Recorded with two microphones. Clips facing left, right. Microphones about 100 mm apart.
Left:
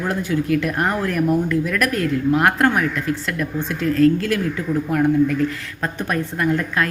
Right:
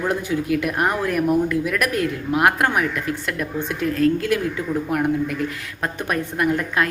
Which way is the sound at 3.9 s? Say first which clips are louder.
Left 4 dB; 30° right (ahead or behind).